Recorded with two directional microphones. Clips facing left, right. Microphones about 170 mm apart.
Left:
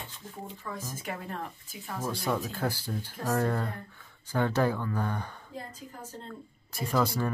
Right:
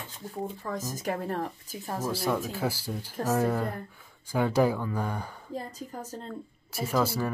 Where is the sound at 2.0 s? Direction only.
5° right (ahead or behind).